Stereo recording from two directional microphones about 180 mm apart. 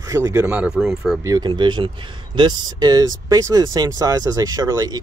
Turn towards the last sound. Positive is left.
turn(degrees=-20)  # may be behind; listen again after turning